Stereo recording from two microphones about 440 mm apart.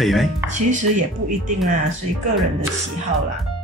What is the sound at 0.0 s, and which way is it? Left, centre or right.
Speech, centre.